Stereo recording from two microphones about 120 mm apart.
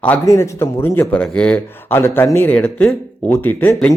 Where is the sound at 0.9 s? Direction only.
10° left (ahead or behind).